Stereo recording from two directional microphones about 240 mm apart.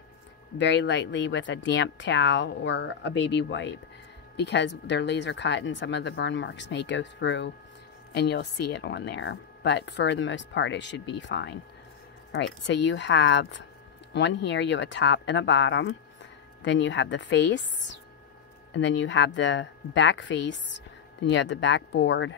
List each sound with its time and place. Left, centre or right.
0.6 s speech: left